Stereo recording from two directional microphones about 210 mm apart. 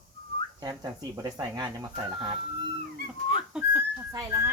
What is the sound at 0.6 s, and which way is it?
Speech, 20° right (ahead or behind).